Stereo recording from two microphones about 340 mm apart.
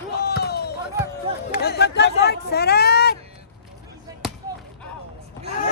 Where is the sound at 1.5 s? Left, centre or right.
Left.